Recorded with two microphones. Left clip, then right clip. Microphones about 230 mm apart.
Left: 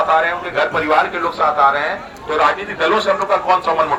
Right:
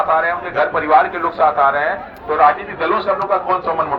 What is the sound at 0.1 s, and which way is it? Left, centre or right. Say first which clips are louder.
A man's voice: left 1 dB; left.